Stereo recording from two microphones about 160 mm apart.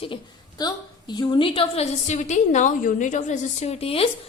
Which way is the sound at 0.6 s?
25° left (ahead or behind).